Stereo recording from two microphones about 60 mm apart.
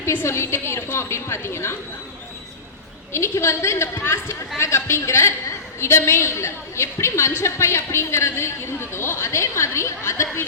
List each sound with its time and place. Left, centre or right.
0.0 s a woman's voice: left
3.1 s a woman's voice: left